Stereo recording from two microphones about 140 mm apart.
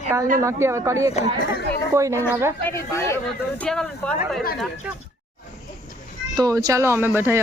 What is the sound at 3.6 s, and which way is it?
Speech, 5° left (ahead or behind).